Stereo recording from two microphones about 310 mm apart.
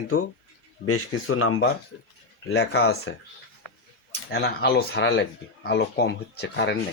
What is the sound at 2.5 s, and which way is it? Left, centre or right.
Speech, left.